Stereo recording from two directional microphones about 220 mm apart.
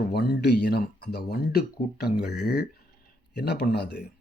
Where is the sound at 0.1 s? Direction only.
50° left (ahead or behind).